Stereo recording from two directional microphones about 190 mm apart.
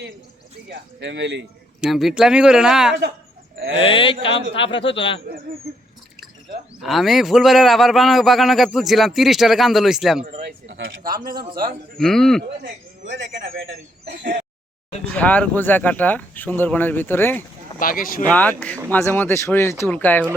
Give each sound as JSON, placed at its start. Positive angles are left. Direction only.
{"t": 0.7, "sound": "speech", "side_deg": -65}
{"t": 1.8, "sound": "speech", "side_deg": 0}
{"t": 3.8, "sound": "speech", "side_deg": 30}
{"t": 6.8, "sound": "speech", "side_deg": 0}
{"t": 10.4, "sound": "speech", "side_deg": -65}
{"t": 11.9, "sound": "speech", "side_deg": 0}
{"t": 12.4, "sound": "a man's voice", "side_deg": -60}
{"t": 15.1, "sound": "speech", "side_deg": 5}
{"t": 17.7, "sound": "speech", "side_deg": 50}
{"t": 18.3, "sound": "speech", "side_deg": 10}